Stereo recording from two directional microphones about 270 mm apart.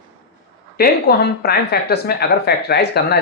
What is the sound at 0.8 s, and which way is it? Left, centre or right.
Speech, left.